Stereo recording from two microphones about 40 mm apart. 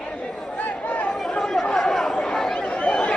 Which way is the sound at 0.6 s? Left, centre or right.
Left.